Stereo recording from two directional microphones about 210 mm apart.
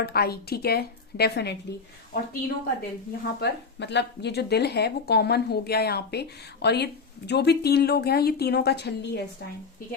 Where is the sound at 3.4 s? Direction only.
55° left (ahead or behind).